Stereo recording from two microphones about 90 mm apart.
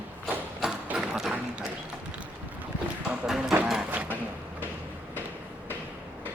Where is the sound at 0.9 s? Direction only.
5° right (ahead or behind).